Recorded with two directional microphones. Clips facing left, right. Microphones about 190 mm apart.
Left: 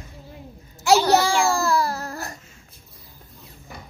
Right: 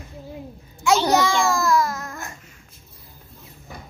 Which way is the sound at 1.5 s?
30° left (ahead or behind).